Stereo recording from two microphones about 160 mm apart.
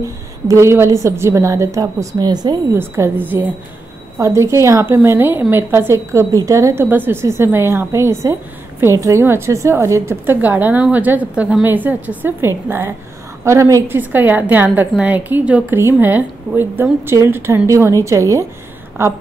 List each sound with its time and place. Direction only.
0.5 s a woman's voice: 15° right (ahead or behind)
2.8 s a woman's voice: 15° right (ahead or behind)